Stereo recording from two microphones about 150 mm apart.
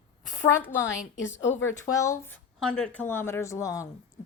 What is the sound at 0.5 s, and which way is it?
Speech, 15° left (ahead or behind).